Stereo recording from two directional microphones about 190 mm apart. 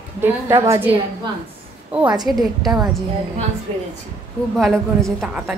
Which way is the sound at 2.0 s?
20° right (ahead or behind).